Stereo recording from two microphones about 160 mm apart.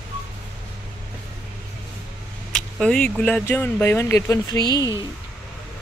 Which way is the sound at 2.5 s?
5° left (ahead or behind).